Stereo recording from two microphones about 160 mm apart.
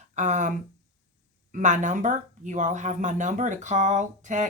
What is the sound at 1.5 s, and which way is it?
Speech, 50° right (ahead or behind).